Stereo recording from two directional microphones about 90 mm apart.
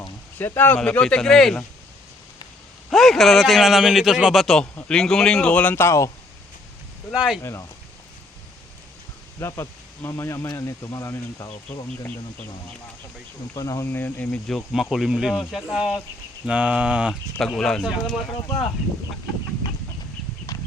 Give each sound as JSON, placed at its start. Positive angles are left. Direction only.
{"t": 0.3, "sound": "speech", "side_deg": 20}
{"t": 0.8, "sound": "speech", "side_deg": 10}
{"t": 2.9, "sound": "speech", "side_deg": 0}
{"t": 5.7, "sound": "speech", "side_deg": 30}
{"t": 7.1, "sound": "a sound", "side_deg": -10}
{"t": 9.4, "sound": "speech", "side_deg": 30}
{"t": 12.0, "sound": "speech", "side_deg": 15}
{"t": 13.5, "sound": "speech", "side_deg": 40}
{"t": 13.8, "sound": "speech", "side_deg": 25}
{"t": 14.3, "sound": "speech", "side_deg": 5}
{"t": 15.7, "sound": "a sound", "side_deg": -5}
{"t": 17.4, "sound": "speech", "side_deg": 5}